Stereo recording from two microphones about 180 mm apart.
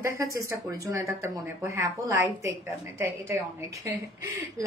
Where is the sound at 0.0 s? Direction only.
15° right (ahead or behind).